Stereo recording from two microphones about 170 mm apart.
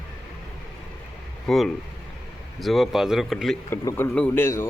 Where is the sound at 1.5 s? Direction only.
Centre (ahead or behind).